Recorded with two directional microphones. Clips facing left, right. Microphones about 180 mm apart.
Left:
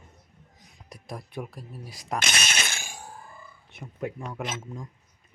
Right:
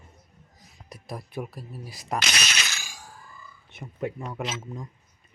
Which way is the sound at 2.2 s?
50° left (ahead or behind).